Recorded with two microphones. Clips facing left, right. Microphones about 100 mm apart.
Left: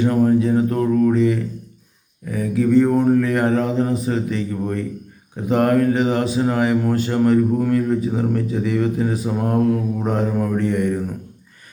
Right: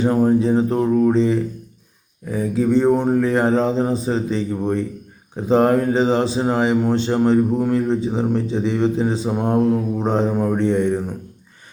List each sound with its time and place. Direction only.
0.0 s speech: 25° right (ahead or behind)